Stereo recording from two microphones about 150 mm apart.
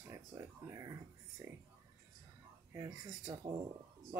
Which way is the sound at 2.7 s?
20° right (ahead or behind).